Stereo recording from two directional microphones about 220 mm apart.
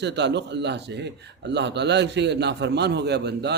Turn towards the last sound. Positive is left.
turn(degrees=-50)  # may be behind; listen again after turning